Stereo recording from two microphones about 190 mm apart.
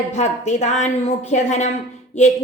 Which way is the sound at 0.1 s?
35° left (ahead or behind).